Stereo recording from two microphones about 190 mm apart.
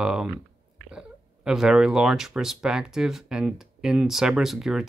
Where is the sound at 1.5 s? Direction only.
5° right (ahead or behind).